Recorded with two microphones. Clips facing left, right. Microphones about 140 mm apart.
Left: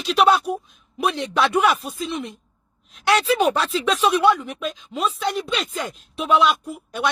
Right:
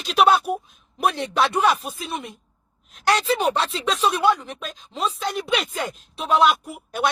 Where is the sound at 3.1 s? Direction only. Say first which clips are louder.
Left 2 dB; 35° right (ahead or behind).